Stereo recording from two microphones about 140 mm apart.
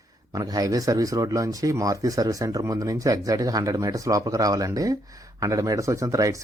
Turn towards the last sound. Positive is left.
turn(degrees=-25)  # may be behind; listen again after turning